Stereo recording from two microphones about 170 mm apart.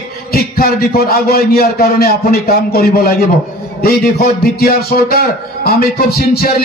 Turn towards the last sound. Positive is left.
turn(degrees=65)  # may be behind; listen again after turning